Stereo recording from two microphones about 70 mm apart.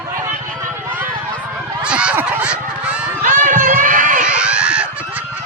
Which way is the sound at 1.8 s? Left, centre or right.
Centre.